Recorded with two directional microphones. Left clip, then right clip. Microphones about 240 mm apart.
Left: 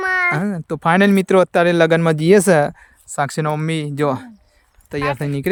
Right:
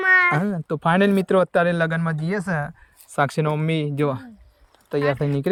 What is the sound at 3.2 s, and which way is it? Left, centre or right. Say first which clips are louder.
A child's voice: left 2 dB; centre.